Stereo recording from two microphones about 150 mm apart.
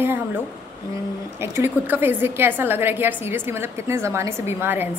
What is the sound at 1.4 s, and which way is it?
A woman's voice, 15° right (ahead or behind).